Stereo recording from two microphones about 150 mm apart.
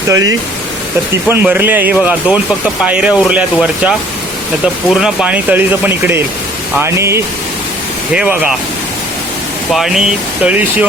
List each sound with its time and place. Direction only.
0.1 s speech: 25° right (ahead or behind)
1.3 s speech: 15° right (ahead or behind)
4.9 s speech: 5° right (ahead or behind)
8.1 s speech: 5° right (ahead or behind)
9.7 s speech: centre (ahead or behind)